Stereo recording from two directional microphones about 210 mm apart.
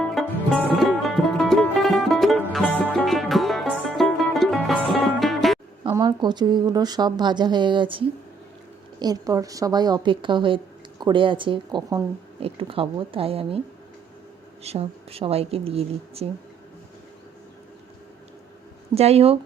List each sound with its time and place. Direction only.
0.1 s music: centre (ahead or behind)
5.8 s a woman's voice: 20° right (ahead or behind)
14.6 s a woman's voice: 30° right (ahead or behind)
18.9 s a woman's voice: 30° right (ahead or behind)